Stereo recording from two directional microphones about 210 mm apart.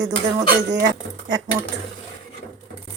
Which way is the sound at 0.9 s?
20° right (ahead or behind).